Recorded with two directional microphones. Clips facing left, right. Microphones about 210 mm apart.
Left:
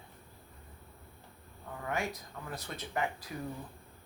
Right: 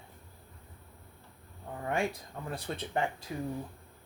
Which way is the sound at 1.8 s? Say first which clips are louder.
Right 4 dB; 30° right (ahead or behind).